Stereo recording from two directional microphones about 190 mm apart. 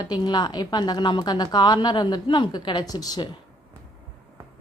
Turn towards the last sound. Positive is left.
turn(degrees=20)  # may be behind; listen again after turning